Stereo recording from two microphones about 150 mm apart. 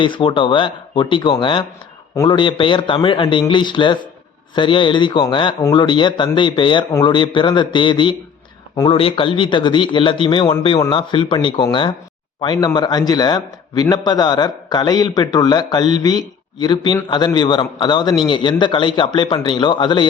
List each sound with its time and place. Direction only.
0.0 s a man's voice: 35° left (ahead or behind)